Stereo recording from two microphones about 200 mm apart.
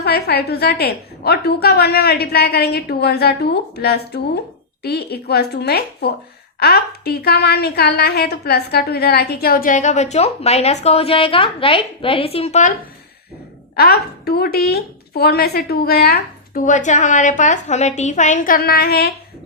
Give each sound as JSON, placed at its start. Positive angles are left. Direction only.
{"t": 0.0, "sound": "a woman's voice", "side_deg": 50}
{"t": 13.7, "sound": "a woman's voice", "side_deg": 50}